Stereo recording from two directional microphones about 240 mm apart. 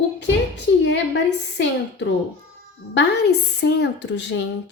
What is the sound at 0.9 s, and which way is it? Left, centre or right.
A woman's voice, left.